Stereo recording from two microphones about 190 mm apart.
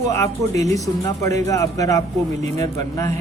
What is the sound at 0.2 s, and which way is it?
Speech, 15° left (ahead or behind).